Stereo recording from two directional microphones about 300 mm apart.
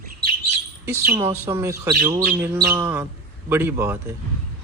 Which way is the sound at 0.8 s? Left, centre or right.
Centre.